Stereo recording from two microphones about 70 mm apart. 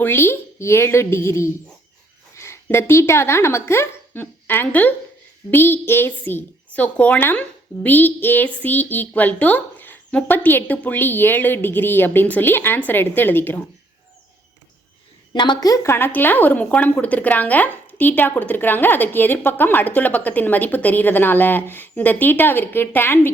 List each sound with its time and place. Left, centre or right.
0.0 s a woman's voice: left
15.3 s a woman's voice: left
15.7 s speech: left